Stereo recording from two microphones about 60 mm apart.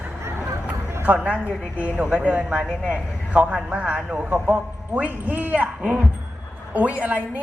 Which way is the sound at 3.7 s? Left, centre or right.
Right.